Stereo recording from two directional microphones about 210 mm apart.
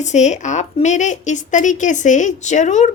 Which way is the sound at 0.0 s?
35° left (ahead or behind).